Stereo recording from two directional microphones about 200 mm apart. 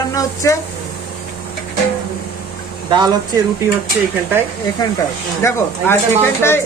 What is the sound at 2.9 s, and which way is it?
Speech, 20° right (ahead or behind).